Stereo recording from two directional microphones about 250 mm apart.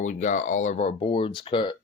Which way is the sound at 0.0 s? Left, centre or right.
Left.